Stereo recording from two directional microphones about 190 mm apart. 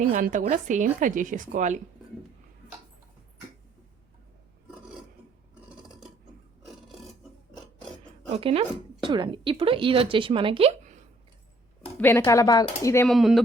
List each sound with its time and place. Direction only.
0.1 s speech: 45° right (ahead or behind)
6.8 s filing: centre (ahead or behind)
8.4 s speech: 30° right (ahead or behind)
11.9 s speech: 10° left (ahead or behind)
13.1 s speech: centre (ahead or behind)